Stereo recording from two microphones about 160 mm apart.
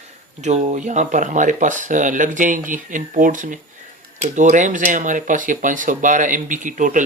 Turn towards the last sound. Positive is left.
turn(degrees=-55)  # may be behind; listen again after turning